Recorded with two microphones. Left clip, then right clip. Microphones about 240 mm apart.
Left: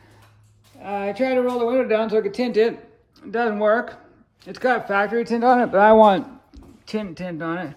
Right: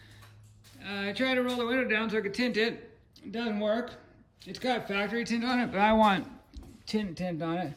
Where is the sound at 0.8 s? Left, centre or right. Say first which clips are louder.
Left 10 dB; left.